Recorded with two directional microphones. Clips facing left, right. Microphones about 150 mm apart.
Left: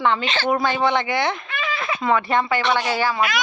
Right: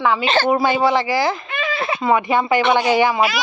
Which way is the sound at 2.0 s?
10° right (ahead or behind).